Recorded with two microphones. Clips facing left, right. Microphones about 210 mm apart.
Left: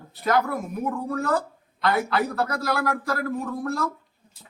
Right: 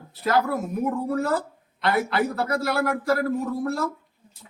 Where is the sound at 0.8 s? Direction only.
25° right (ahead or behind).